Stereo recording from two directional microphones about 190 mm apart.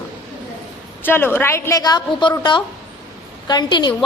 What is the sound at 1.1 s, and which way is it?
A woman's voice, 10° left (ahead or behind).